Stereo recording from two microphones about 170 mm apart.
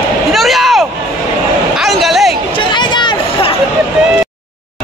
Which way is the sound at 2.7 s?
25° left (ahead or behind).